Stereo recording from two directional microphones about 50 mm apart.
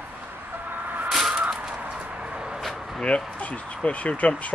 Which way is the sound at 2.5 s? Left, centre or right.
Centre.